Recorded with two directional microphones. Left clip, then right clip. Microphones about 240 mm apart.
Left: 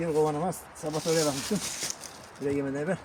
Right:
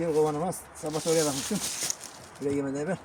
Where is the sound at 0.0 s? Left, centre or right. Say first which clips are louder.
Right 1 dB; centre.